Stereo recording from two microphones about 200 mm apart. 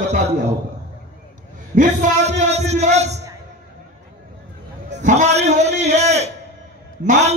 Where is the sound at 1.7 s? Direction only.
35° right (ahead or behind).